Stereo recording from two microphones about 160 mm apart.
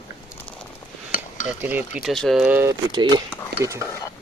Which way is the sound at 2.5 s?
15° right (ahead or behind).